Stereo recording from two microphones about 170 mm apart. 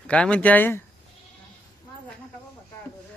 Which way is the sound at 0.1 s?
5° left (ahead or behind).